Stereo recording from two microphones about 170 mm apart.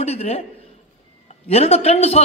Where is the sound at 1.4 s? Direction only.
35° left (ahead or behind).